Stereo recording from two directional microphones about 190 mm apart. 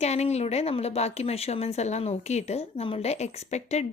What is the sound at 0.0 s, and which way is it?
A woman's voice, 35° left (ahead or behind).